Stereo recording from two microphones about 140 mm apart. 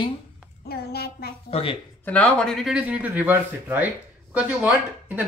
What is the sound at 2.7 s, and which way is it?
Speech, 10° right (ahead or behind).